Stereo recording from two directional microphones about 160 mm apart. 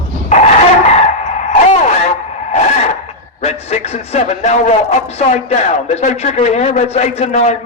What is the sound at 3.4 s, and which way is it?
A man's voice, 40° left (ahead or behind).